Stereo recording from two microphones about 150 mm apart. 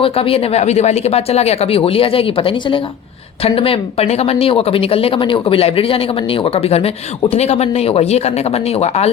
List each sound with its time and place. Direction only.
0.0 s speech: 40° left (ahead or behind)